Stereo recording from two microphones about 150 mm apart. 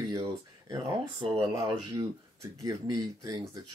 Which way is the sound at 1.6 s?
35° right (ahead or behind).